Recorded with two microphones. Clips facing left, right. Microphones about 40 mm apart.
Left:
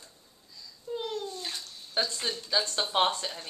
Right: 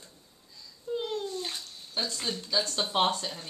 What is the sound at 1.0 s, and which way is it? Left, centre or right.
Bathtub, centre.